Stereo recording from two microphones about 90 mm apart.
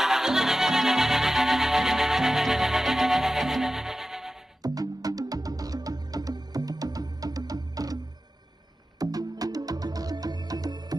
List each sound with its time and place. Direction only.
0.0 s music: 5° right (ahead or behind)
4.6 s music: 45° right (ahead or behind)
9.0 s music: 45° right (ahead or behind)